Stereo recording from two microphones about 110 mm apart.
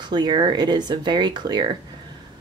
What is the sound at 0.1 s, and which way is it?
Speech, 45° right (ahead or behind).